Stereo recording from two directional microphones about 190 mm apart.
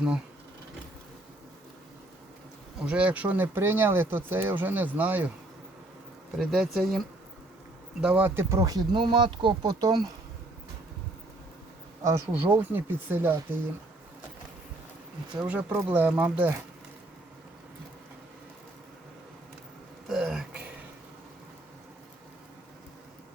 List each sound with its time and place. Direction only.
2.7 s speech: 5° right (ahead or behind)
6.4 s speech: 5° right (ahead or behind)
8.0 s speech: 10° right (ahead or behind)
12.0 s speech: 15° right (ahead or behind)
15.4 s speech: 10° right (ahead or behind)
20.1 s a sound: centre (ahead or behind)